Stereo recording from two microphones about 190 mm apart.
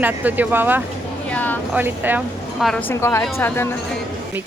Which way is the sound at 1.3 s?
10° left (ahead or behind).